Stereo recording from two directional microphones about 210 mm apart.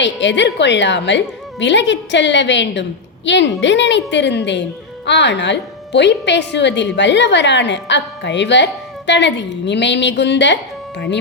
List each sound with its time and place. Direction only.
0.0 s a woman's voice: 60° left (ahead or behind)